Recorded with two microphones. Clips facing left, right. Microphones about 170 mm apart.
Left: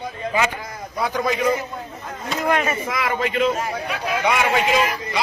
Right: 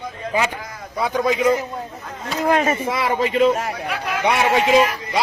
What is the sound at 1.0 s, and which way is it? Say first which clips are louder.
Speech: right 2 dB; centre (ahead or behind).